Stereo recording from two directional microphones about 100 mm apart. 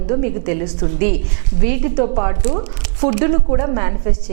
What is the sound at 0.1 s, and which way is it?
Speech, 15° right (ahead or behind).